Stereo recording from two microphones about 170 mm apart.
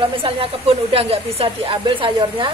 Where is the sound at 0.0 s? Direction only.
30° right (ahead or behind).